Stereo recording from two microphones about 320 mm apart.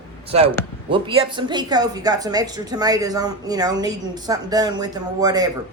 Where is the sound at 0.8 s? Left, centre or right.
Centre.